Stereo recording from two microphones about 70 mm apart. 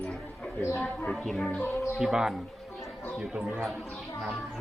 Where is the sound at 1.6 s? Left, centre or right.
Left.